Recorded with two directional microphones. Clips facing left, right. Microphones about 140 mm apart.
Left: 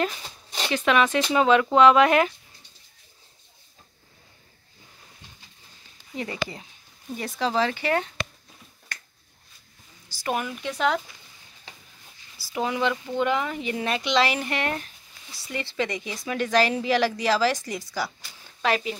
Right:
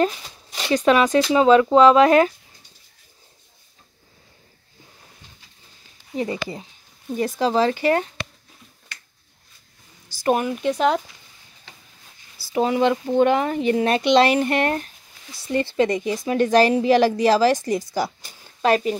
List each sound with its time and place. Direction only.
0.7 s a woman's voice: 35° right (ahead or behind)
6.1 s a woman's voice: 30° right (ahead or behind)
8.9 s finger snapping: 50° left (ahead or behind)
10.0 s a woman's voice: 40° right (ahead or behind)
12.5 s a woman's voice: 30° right (ahead or behind)
13.3 s a woman's voice: 45° right (ahead or behind)